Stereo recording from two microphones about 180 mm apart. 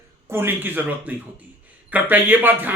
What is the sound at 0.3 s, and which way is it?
Speech, 10° right (ahead or behind).